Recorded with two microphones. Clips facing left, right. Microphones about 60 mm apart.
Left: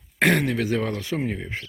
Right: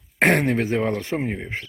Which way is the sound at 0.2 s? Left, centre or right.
Right.